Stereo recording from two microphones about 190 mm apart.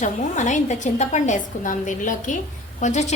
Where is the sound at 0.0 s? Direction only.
40° left (ahead or behind).